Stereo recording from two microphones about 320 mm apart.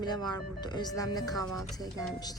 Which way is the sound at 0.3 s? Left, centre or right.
Centre.